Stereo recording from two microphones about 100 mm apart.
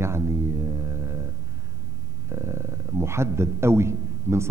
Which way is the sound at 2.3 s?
25° right (ahead or behind).